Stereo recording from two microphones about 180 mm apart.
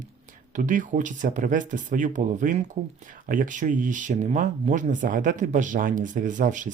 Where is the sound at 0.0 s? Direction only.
45° right (ahead or behind).